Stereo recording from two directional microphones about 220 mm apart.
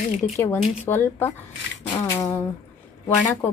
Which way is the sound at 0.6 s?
10° left (ahead or behind).